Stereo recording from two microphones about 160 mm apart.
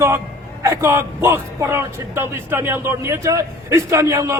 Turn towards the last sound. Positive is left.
turn(degrees=-20)  # may be behind; listen again after turning